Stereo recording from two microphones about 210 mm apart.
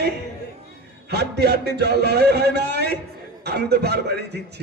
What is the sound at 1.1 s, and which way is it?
A man's voice, 50° right (ahead or behind).